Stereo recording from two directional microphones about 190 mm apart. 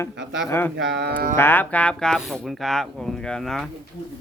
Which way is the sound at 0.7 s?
60° right (ahead or behind).